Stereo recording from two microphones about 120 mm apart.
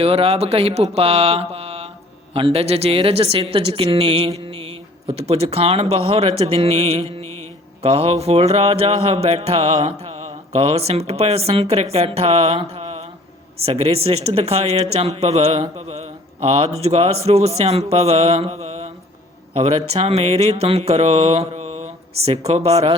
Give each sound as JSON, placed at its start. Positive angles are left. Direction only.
{"t": 0.0, "sound": "speech", "side_deg": -55}